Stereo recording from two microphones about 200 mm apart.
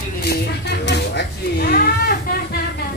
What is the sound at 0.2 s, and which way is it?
Cat, 55° left (ahead or behind).